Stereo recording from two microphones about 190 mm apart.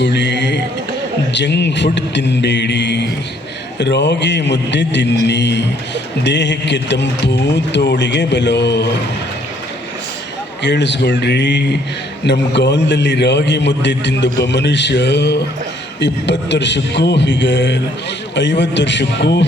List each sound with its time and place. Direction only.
0.0 s a sound: 65° left (ahead or behind)
1.3 s a man's voice: 65° left (ahead or behind)
10.6 s a man's voice: 65° left (ahead or behind)